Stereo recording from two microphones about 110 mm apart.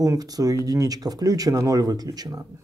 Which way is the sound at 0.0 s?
35° right (ahead or behind).